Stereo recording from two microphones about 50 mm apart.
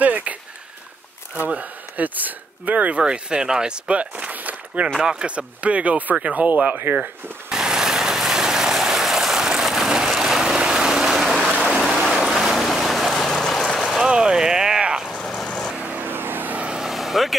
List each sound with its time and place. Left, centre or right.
0.0 s a sound: right
1.5 s speech: right
3.0 s speech: centre
6.4 s speech: right
7.4 s vehicle: centre
11.2 s a sound: centre
12.1 s boat: centre
13.7 s vehicle: centre
14.0 s a sound: centre
15.0 s vehicle: centre
15.7 s vehicle: right
16.0 s vehicle: right
16.5 s vehicle: right
16.8 s vehicle: centre